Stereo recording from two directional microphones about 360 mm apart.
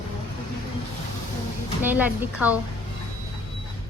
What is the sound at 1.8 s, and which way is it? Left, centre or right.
Speech, centre.